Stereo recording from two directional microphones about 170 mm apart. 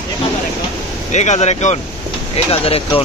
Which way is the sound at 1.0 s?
45° left (ahead or behind).